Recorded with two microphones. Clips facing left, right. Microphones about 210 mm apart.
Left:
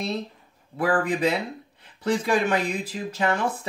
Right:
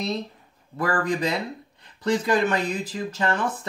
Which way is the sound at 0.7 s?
5° left (ahead or behind).